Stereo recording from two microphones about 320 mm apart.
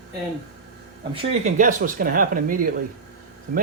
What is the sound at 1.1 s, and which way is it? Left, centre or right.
Speech, centre.